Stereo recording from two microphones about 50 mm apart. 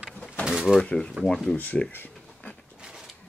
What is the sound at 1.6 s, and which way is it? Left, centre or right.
Speech, left.